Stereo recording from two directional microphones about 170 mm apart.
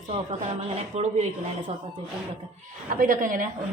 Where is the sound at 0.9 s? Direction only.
40° right (ahead or behind).